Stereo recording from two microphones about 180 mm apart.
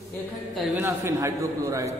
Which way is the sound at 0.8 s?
15° right (ahead or behind).